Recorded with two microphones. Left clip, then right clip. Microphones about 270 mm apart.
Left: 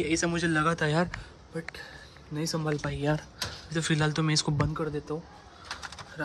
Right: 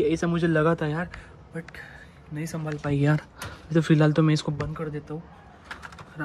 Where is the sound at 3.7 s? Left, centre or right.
Centre.